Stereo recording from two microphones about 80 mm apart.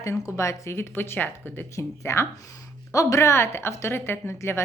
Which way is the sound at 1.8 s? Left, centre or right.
Left.